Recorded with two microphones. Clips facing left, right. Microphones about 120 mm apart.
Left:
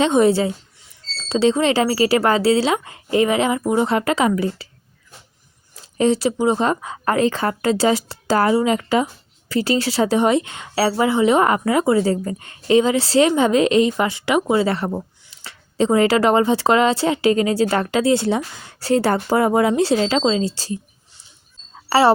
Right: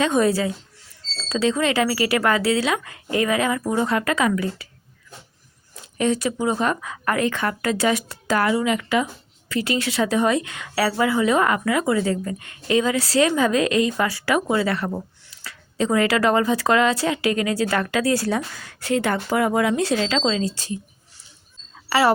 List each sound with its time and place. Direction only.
0.0 s a woman's voice: 25° left (ahead or behind)
6.0 s a woman's voice: 30° left (ahead or behind)
21.8 s speech: 35° left (ahead or behind)